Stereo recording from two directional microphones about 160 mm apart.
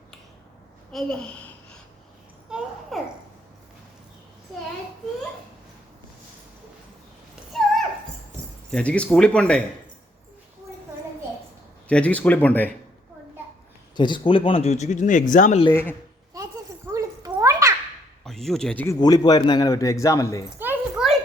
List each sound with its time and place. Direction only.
0.9 s a woman's voice: 5° left (ahead or behind)
2.5 s babbling: 5° right (ahead or behind)
7.5 s a sound: centre (ahead or behind)
8.7 s speech: 5° left (ahead or behind)
11.9 s speech: 10° left (ahead or behind)
13.9 s speech: 30° left (ahead or behind); by 15.6 s 50° left (ahead or behind)
15.7 s speech: 15° left (ahead or behind)
16.3 s a sound: 20° right (ahead or behind)
18.3 s speech: centre (ahead or behind)
18.9 s a man's voice: 25° left (ahead or behind)
20.6 s a sound: 10° right (ahead or behind)